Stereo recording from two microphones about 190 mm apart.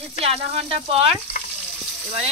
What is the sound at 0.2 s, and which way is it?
Speech, 30° right (ahead or behind).